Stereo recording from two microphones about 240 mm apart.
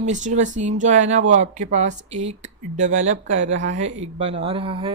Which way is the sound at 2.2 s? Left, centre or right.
Right.